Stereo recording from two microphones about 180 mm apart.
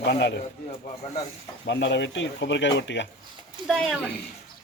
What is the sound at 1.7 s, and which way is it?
Speech, 80° left.